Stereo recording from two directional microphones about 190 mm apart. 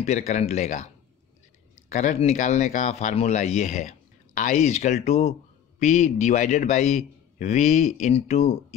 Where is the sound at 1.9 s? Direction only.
40° left (ahead or behind).